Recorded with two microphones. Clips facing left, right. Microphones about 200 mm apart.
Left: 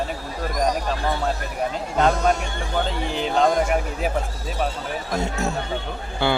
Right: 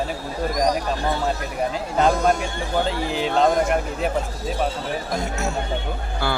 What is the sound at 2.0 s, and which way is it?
A man's voice, 5° right (ahead or behind).